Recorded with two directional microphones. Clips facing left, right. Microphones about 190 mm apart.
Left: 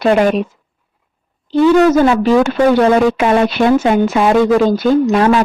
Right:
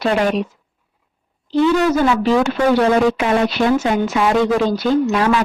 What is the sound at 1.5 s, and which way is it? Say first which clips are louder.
A woman's voice: left 5 dB; 50° left (ahead or behind).